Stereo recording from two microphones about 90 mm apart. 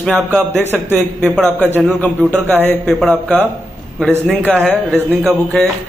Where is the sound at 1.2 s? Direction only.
5° left (ahead or behind).